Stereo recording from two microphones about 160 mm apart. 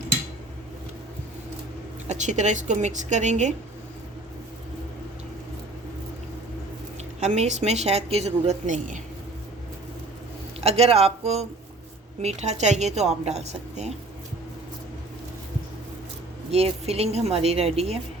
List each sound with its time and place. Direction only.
2.0 s a woman's voice: 50° right (ahead or behind)
7.2 s a woman's voice: 45° right (ahead or behind)
10.6 s a woman's voice: 40° right (ahead or behind)
16.5 s a woman's voice: 40° right (ahead or behind)